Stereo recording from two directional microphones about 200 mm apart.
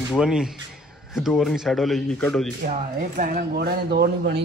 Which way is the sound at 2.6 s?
45° right (ahead or behind).